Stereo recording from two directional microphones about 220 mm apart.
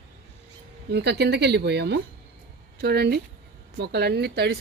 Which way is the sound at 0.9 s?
50° right (ahead or behind).